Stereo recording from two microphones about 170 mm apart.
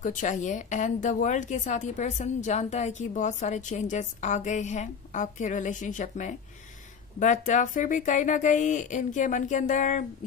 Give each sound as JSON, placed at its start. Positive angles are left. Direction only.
{"t": 0.0, "sound": "speech", "side_deg": 50}